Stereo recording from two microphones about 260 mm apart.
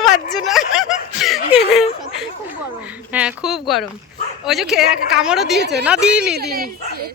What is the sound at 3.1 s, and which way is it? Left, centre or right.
Speech, centre.